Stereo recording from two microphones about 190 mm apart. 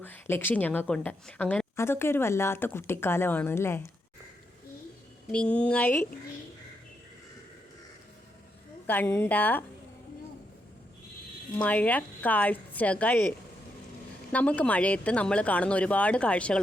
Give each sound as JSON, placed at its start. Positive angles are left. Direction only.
{"t": 0.0, "sound": "a woman's voice", "side_deg": 10}
{"t": 5.3, "sound": "a woman's voice", "side_deg": 5}
{"t": 8.9, "sound": "a woman's voice", "side_deg": 10}
{"t": 11.5, "sound": "a woman's voice", "side_deg": 10}
{"t": 14.3, "sound": "a woman's voice", "side_deg": 5}